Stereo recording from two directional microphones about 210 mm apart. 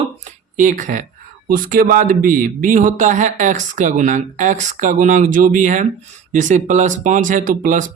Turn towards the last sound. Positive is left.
turn(degrees=-40)  # may be behind; listen again after turning